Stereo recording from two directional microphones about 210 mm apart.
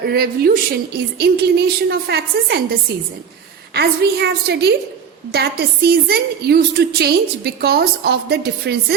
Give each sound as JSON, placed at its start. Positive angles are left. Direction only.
{"t": 0.0, "sound": "a woman's voice", "side_deg": -45}
{"t": 3.8, "sound": "a woman's voice", "side_deg": -50}